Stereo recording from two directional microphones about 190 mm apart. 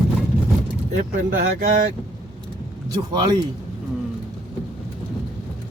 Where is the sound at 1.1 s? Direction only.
50° right (ahead or behind).